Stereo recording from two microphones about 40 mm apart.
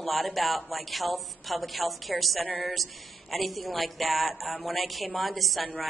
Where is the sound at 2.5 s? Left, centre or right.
Left.